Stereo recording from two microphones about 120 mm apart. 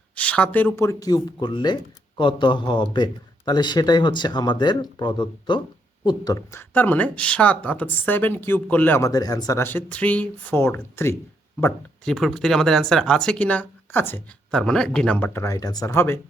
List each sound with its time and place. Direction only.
0.2 s speech: 10° left (ahead or behind)
0.9 s speech: 30° left (ahead or behind)
6.1 s speech: 30° left (ahead or behind); by 9.0 s 15° left (ahead or behind)
9.0 s speech: 30° left (ahead or behind)
9.6 s speech: 15° left (ahead or behind)
12.0 s speech: centre (ahead or behind)
15.3 s speech: 25° left (ahead or behind)